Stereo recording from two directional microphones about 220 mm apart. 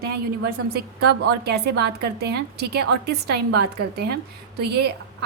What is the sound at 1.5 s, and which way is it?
A woman's voice, 50° right (ahead or behind).